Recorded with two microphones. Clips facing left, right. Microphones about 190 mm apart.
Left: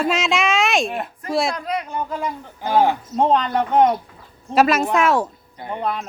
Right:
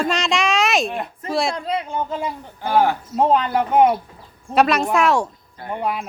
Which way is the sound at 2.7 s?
15° left (ahead or behind).